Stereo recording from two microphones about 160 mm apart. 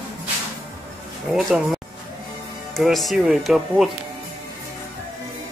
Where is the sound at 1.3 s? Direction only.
Centre (ahead or behind).